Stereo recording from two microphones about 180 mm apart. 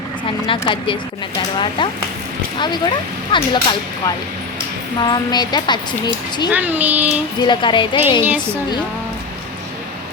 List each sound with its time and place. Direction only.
0.4 s a woman's voice: 30° left (ahead or behind)
6.5 s a child's voice: 10° right (ahead or behind)
7.4 s a woman's voice: 25° left (ahead or behind)
8.2 s a child's voice: 10° right (ahead or behind)